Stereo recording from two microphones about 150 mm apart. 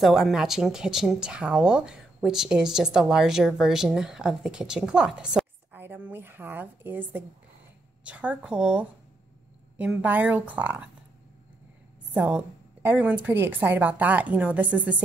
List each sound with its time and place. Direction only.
0.0 s a woman's voice: centre (ahead or behind)
12.1 s a woman's voice: 10° right (ahead or behind)